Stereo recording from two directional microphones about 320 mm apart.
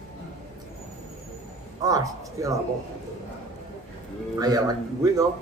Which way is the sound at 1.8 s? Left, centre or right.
Centre.